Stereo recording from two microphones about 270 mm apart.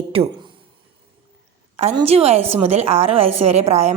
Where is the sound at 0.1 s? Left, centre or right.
Right.